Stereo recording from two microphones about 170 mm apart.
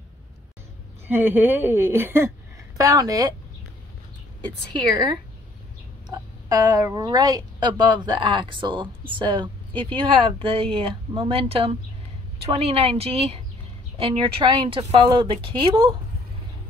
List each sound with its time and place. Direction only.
1.0 s speech: 10° right (ahead or behind)
6.1 s speech: 20° right (ahead or behind)